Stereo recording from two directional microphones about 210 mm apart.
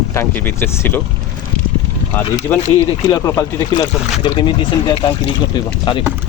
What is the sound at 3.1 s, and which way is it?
Speech, 20° left (ahead or behind).